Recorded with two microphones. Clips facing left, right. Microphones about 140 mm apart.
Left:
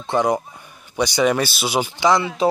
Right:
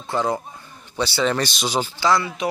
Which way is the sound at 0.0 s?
20° left (ahead or behind).